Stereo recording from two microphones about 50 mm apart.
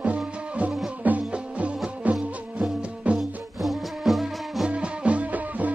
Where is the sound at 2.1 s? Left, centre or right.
Centre.